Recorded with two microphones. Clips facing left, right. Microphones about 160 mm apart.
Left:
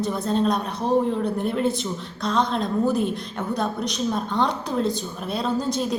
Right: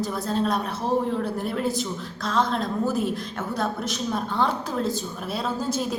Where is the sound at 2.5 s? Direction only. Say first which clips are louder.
Left 3 dB; 20° left (ahead or behind).